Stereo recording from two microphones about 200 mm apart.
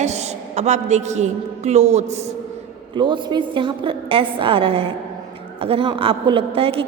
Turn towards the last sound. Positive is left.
turn(degrees=-30)  # may be behind; listen again after turning